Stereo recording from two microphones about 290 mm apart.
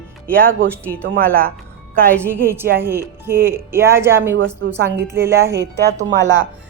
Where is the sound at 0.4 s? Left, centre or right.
Right.